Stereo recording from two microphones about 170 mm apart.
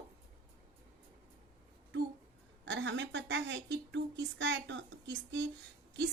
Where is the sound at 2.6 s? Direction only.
90° right.